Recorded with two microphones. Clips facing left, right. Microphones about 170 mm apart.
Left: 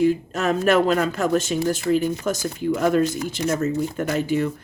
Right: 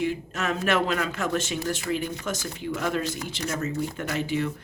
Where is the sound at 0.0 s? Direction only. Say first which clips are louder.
Left 8 dB; 40° left (ahead or behind).